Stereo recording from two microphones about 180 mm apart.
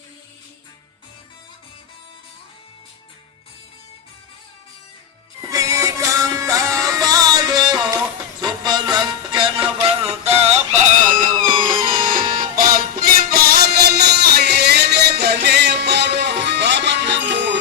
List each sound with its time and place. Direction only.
5.4 s music: 20° right (ahead or behind); by 10.8 s 35° right (ahead or behind)
11.4 s music: 25° right (ahead or behind)
11.9 s music: 50° right (ahead or behind); by 17.6 s 75° right (ahead or behind)